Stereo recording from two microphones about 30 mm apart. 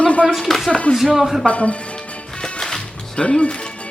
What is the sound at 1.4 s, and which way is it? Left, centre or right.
Speech, left.